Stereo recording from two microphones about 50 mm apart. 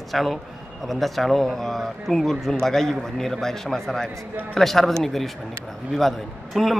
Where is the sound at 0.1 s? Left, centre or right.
Centre.